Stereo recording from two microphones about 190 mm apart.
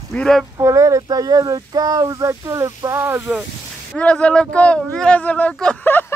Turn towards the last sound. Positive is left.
turn(degrees=10)  # may be behind; listen again after turning